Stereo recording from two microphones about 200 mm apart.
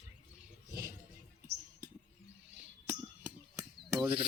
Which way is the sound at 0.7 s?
45° right (ahead or behind).